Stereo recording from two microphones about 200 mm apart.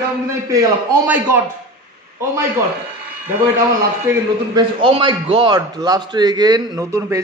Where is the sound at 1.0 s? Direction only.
10° right (ahead or behind).